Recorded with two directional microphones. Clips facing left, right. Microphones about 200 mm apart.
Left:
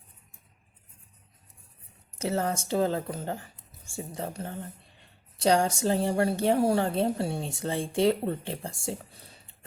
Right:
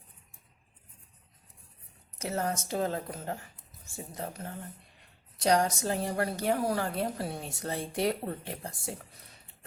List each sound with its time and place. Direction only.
2.1 s speech: 30° left (ahead or behind)